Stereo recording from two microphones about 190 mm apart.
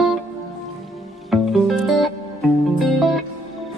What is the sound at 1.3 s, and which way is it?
Music, centre (ahead or behind).